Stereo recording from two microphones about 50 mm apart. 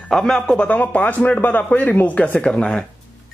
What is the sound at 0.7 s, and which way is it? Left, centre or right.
Speech, left.